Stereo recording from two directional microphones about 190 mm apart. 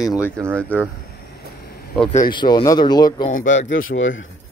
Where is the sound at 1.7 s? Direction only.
50° left (ahead or behind).